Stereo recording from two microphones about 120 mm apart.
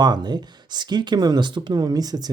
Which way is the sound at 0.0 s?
35° right (ahead or behind).